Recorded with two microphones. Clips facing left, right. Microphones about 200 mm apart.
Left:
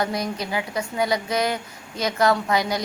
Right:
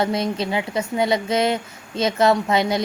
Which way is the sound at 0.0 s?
25° right (ahead or behind).